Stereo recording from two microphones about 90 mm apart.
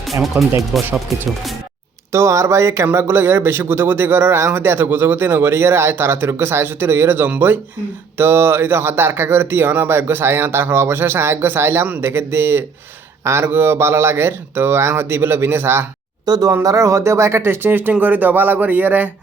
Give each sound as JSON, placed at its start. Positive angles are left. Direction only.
{"t": 0.0, "sound": "speech", "side_deg": 0}
{"t": 2.1, "sound": "speech", "side_deg": -30}
{"t": 16.2, "sound": "speech", "side_deg": -45}
{"t": 16.5, "sound": "speech", "side_deg": -35}